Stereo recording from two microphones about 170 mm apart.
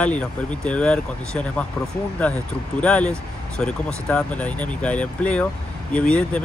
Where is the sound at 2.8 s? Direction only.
5° left (ahead or behind).